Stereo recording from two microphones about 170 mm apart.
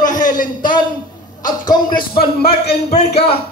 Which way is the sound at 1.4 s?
25° left (ahead or behind).